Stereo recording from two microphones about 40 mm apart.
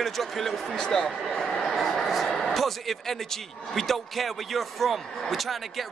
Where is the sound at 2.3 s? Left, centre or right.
Centre.